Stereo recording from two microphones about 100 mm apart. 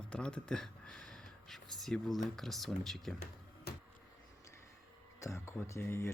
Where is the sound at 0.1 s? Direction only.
10° left (ahead or behind).